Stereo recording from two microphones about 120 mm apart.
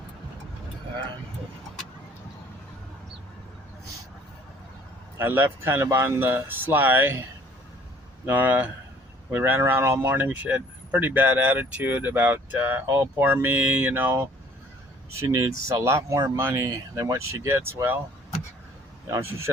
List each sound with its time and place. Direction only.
5.1 s speech: 20° right (ahead or behind)
8.3 s speech: 15° right (ahead or behind)
15.3 s speech: 25° right (ahead or behind)
19.0 s speech: 20° right (ahead or behind)